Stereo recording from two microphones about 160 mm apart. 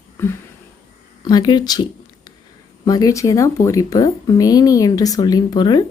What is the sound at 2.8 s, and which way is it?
Speech, 20° left (ahead or behind).